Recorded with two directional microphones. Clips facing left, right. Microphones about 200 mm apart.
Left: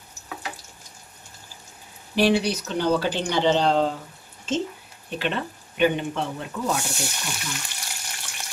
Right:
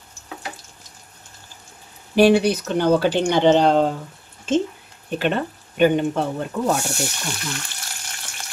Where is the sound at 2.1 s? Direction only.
50° right (ahead or behind).